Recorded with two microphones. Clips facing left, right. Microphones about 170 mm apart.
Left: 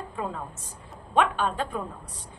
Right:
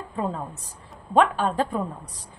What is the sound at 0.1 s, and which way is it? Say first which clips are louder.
A woman's voice: right 7 dB; 30° right (ahead or behind).